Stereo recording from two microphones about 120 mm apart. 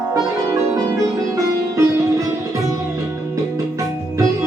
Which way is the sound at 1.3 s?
30° right (ahead or behind).